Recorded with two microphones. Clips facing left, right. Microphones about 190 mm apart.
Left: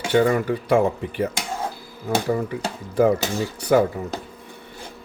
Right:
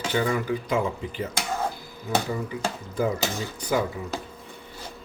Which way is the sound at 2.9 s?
70° left (ahead or behind).